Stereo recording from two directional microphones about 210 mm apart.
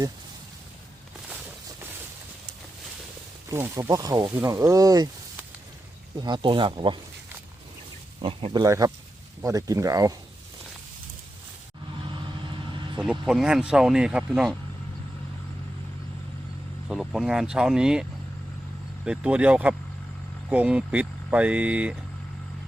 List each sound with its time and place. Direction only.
3.5 s speech: 15° right (ahead or behind)
8.2 s speech: 25° right (ahead or behind)
13.0 s speech: 5° right (ahead or behind)
16.9 s speech: 5° right (ahead or behind)
19.0 s speech: 5° right (ahead or behind)